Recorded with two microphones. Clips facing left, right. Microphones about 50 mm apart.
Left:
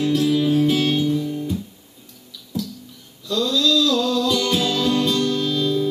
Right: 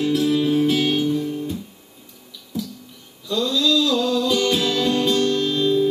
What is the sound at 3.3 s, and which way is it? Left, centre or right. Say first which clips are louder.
Male singing: even; centre.